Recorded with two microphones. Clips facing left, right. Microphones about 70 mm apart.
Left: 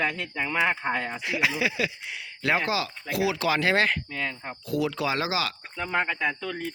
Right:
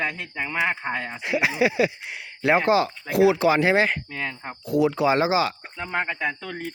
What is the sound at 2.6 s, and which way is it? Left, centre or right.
Speech, right.